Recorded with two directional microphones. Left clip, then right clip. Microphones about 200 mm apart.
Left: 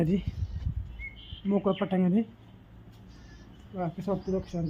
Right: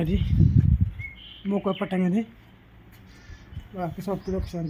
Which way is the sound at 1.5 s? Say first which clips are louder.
Right 1 dB; 25° right (ahead or behind).